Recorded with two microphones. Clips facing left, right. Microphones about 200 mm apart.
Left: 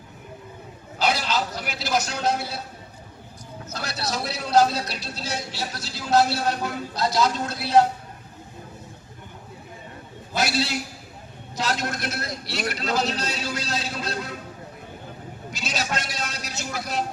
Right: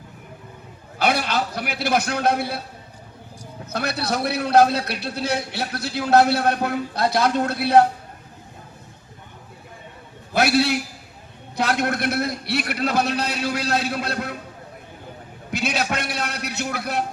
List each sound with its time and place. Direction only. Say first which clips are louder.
0.9 s a man's voice: right 3 dB; 60° right (ahead or behind)
3.7 s a man's voice: right 6 dB; 60° right (ahead or behind)
10.3 s a man's voice: right 6 dB; 60° right (ahead or behind)
15.5 s a man's voice: right 5 dB; 60° right (ahead or behind)